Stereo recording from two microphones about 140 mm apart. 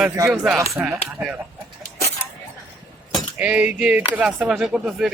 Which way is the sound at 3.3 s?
10° right (ahead or behind).